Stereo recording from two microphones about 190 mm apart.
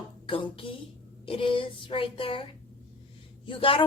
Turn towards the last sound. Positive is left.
turn(degrees=30)  # may be behind; listen again after turning